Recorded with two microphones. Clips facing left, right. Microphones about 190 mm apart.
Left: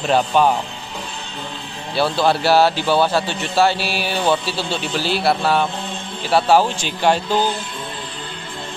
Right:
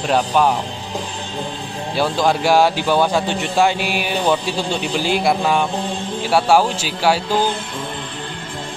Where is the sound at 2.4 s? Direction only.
15° right (ahead or behind).